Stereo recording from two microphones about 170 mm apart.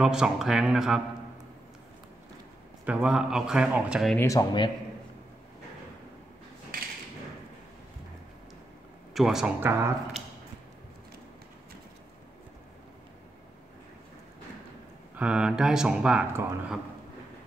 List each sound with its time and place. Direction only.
0.0 s speech: 5° right (ahead or behind)
2.8 s speech: 5° right (ahead or behind)
4.2 s speech: 20° left (ahead or behind)
9.1 s speech: centre (ahead or behind)
9.7 s speech: 15° right (ahead or behind)
15.1 s speech: 5° right (ahead or behind)